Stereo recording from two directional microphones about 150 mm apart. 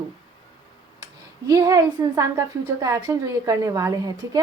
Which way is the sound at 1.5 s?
25° right (ahead or behind).